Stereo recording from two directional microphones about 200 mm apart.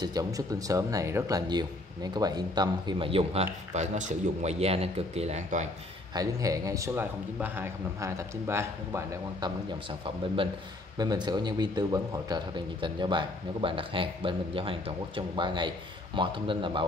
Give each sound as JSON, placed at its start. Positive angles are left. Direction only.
{"t": 0.0, "sound": "speech", "side_deg": -20}
{"t": 6.1, "sound": "speech", "side_deg": -15}